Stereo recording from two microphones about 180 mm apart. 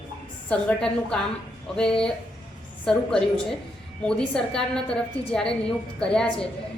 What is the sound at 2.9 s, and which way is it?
A woman's voice, centre (ahead or behind).